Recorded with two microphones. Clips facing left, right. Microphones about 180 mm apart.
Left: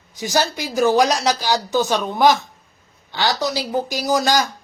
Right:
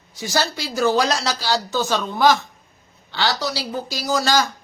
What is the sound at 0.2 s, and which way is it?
Speech, 15° left (ahead or behind).